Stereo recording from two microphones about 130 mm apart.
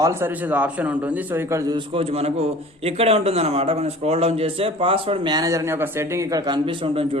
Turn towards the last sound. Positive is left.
turn(degrees=-45)  # may be behind; listen again after turning